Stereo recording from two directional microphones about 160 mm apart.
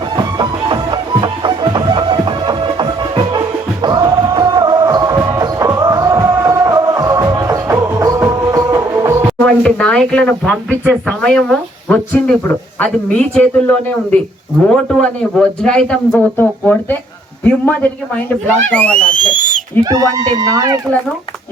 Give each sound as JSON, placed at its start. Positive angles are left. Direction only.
{"t": 0.2, "sound": "music", "side_deg": -25}
{"t": 9.4, "sound": "a man's voice", "side_deg": 5}
{"t": 19.8, "sound": "speech", "side_deg": -25}